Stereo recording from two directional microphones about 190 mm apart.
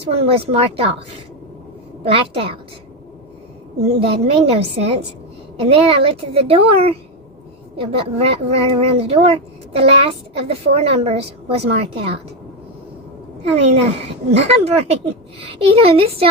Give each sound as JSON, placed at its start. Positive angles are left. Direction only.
{"t": 0.0, "sound": "a child's voice", "side_deg": -30}
{"t": 2.0, "sound": "a woman's voice", "side_deg": -30}
{"t": 4.0, "sound": "a child's voice", "side_deg": -30}
{"t": 13.5, "sound": "a child's voice", "side_deg": -35}